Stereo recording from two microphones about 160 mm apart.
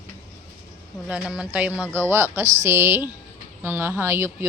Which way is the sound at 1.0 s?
5° right (ahead or behind).